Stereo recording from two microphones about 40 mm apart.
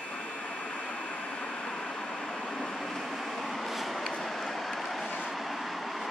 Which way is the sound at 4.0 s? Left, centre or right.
Centre.